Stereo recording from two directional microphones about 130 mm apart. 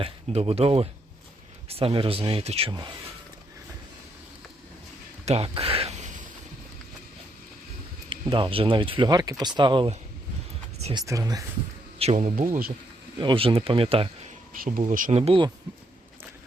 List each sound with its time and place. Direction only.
0.0 s speech: 50° right (ahead or behind)
5.2 s speech: 55° right (ahead or behind)
8.1 s speech: 40° right (ahead or behind)
10.9 s speech: 25° right (ahead or behind)
11.9 s speech: 60° right (ahead or behind)
13.1 s speech: 40° right (ahead or behind)
14.5 s speech: 90° right
15.1 s speech: 50° right (ahead or behind)